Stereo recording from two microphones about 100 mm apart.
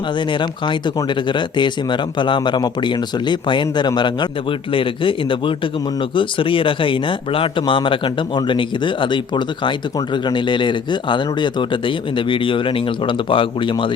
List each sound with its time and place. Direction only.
1.3 s speech: 50° left (ahead or behind)